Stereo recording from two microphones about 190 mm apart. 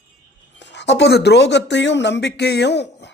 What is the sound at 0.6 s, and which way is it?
Speech, 70° left (ahead or behind).